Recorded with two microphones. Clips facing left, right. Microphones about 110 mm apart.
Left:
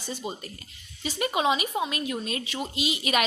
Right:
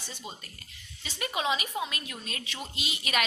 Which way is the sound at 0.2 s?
20° left (ahead or behind).